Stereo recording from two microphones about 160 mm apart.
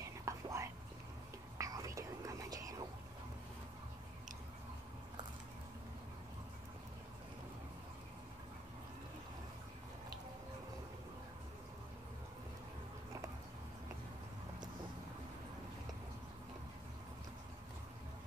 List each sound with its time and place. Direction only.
0.2 s whispering: 20° right (ahead or behind)